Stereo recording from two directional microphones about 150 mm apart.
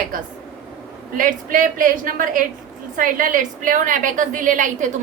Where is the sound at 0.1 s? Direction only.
70° right (ahead or behind).